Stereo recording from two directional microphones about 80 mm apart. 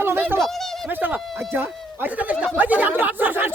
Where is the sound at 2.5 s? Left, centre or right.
Centre.